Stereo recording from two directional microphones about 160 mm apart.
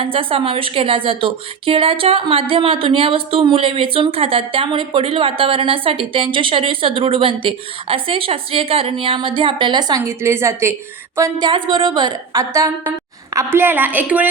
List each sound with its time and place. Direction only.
0.0 s speech: 35° right (ahead or behind)
10.0 s a woman's voice: 15° right (ahead or behind)
11.2 s a woman's voice: 30° right (ahead or behind); by 14.3 s 10° right (ahead or behind)